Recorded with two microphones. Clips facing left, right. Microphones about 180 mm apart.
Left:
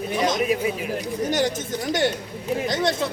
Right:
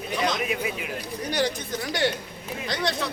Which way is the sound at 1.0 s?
20° left (ahead or behind).